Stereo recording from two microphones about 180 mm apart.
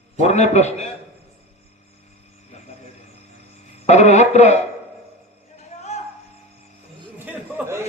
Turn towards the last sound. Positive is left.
turn(degrees=-15)  # may be behind; listen again after turning